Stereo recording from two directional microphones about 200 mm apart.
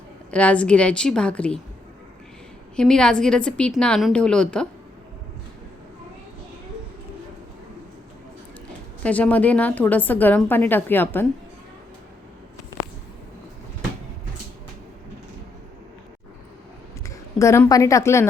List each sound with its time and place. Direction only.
0.3 s a woman's voice: 5° left (ahead or behind)
2.7 s a woman's voice: 5° left (ahead or behind)
9.0 s a woman's voice: 5° left (ahead or behind)
17.0 s speech: 15° left (ahead or behind)